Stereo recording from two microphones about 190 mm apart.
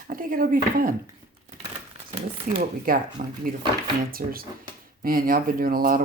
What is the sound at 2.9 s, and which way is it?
Speech, 50° right (ahead or behind).